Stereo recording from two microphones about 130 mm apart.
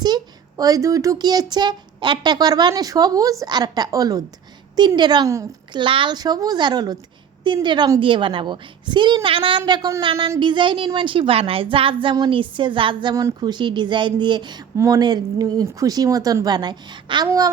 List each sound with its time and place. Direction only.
0.0 s a woman's voice: 30° right (ahead or behind)
5.8 s a woman's voice: 40° right (ahead or behind)